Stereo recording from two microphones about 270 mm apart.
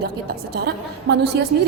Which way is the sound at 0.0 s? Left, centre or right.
Right.